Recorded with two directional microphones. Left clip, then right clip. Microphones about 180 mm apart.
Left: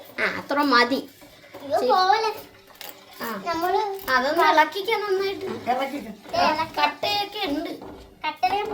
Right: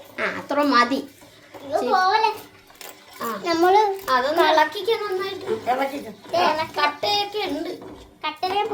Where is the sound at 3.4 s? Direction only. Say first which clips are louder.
Right 7 dB; 65° right (ahead or behind).